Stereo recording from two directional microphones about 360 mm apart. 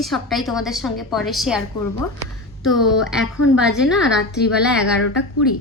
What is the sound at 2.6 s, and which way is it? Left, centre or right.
A woman's voice, centre.